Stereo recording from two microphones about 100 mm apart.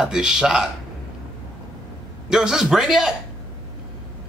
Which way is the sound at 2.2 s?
5° right (ahead or behind).